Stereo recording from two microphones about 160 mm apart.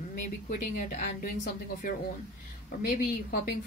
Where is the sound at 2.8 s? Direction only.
65° left (ahead or behind).